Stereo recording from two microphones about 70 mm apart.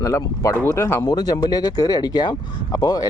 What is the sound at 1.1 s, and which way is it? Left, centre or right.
Speech, left.